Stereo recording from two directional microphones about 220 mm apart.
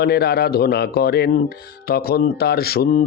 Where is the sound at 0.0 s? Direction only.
45° left (ahead or behind).